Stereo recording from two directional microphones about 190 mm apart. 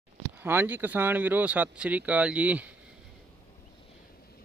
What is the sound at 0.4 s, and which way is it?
Speech, 10° right (ahead or behind).